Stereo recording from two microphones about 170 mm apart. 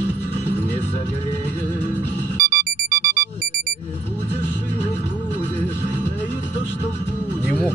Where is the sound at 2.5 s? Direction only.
60° right (ahead or behind).